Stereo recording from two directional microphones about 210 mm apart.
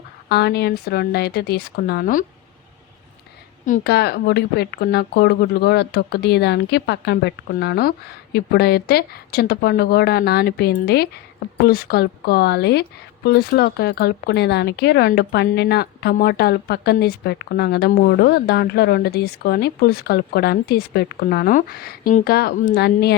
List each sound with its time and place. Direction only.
0.3 s speech: 50° left (ahead or behind)
3.7 s speech: 50° left (ahead or behind)